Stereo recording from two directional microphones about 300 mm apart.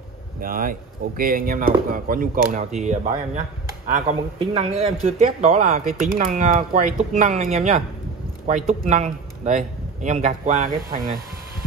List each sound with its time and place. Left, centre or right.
0.4 s a man's voice: right